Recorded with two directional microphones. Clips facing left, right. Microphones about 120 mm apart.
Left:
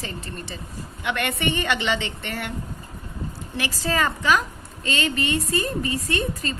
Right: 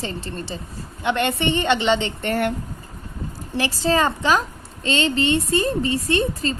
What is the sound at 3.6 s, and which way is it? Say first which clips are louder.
A woman's voice: right 5 dB; 30° right (ahead or behind).